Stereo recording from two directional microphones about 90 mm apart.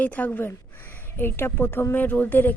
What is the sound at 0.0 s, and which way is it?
A woman's voice, 20° left (ahead or behind).